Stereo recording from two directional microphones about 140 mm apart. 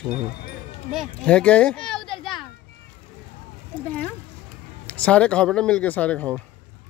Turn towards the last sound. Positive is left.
turn(degrees=10)  # may be behind; listen again after turning